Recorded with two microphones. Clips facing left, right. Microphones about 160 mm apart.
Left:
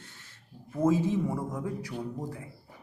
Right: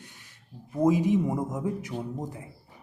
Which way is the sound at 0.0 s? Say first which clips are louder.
Right 2 dB; 15° right (ahead or behind).